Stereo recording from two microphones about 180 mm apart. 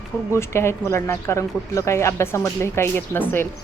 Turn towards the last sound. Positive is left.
turn(degrees=10)  # may be behind; listen again after turning